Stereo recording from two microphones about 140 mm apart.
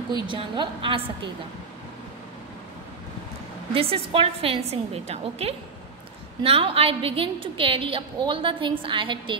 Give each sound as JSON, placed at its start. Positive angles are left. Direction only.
{"t": 0.1, "sound": "a woman's voice", "side_deg": -35}
{"t": 3.7, "sound": "a woman's voice", "side_deg": -40}